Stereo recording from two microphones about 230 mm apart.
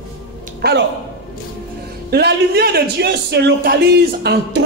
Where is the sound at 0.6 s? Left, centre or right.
Right.